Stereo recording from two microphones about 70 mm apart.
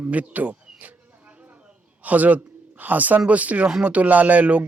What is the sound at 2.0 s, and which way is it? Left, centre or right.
A man's voice, right.